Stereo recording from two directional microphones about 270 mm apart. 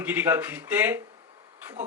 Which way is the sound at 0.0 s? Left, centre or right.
Centre.